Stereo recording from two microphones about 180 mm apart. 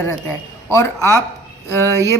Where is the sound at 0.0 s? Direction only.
15° left (ahead or behind).